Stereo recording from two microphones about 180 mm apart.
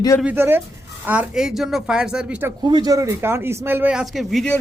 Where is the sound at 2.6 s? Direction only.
25° right (ahead or behind).